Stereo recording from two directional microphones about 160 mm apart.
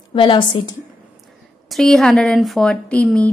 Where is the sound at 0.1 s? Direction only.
30° left (ahead or behind).